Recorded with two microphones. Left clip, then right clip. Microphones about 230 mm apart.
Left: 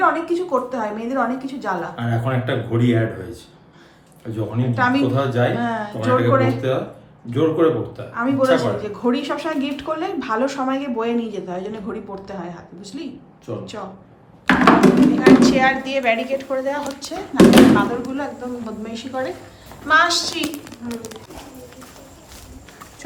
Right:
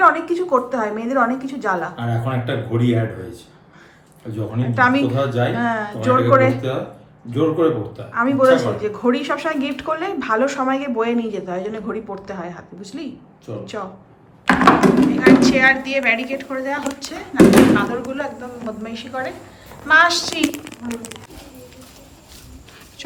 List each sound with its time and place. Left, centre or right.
0.0 s a man's voice: centre
14.4 s a sound: centre
15.4 s a woman's voice: centre
17.3 s a man's voice: centre